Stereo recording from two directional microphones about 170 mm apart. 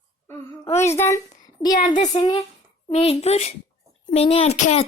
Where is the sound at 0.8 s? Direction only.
15° left (ahead or behind).